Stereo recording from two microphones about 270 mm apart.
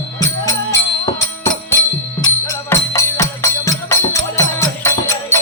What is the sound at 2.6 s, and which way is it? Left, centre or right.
Music, centre.